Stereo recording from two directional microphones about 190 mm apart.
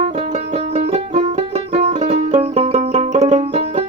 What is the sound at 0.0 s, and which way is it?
Music, 35° right (ahead or behind).